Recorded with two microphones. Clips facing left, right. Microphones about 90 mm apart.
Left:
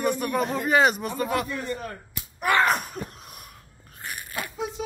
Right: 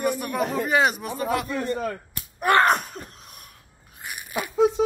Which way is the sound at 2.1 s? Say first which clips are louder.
Right 3 dB; 50° right (ahead or behind).